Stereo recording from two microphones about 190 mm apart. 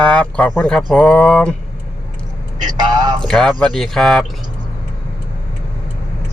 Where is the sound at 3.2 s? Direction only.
5° left (ahead or behind).